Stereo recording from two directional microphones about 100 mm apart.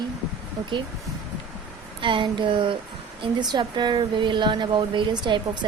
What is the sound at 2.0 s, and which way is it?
A woman's voice, 55° right (ahead or behind).